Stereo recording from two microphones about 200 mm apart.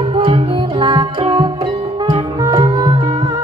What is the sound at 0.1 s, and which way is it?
Music, 25° right (ahead or behind).